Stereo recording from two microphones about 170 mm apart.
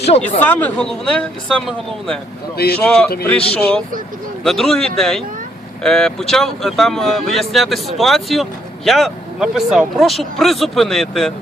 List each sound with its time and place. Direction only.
0.0 s speech: 40° left (ahead or behind)
0.4 s speech: 10° left (ahead or behind)